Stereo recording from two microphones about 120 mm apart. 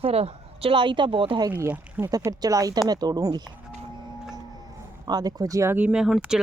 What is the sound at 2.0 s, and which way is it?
Speech, 30° right (ahead or behind).